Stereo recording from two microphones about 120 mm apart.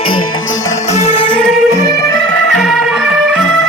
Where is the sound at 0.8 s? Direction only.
65° left (ahead or behind).